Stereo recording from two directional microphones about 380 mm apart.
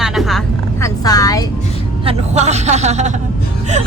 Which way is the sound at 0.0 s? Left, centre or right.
Centre.